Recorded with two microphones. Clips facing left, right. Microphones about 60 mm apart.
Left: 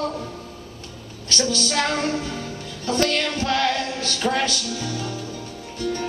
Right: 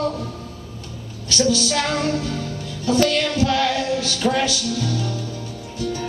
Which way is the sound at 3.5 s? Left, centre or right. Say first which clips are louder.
Right 1 dB; centre.